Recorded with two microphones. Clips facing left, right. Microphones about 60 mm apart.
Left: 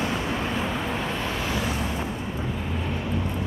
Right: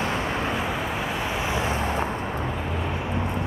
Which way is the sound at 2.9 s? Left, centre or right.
Right.